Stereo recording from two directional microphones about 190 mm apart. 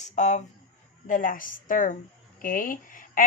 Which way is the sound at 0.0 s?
40° left (ahead or behind).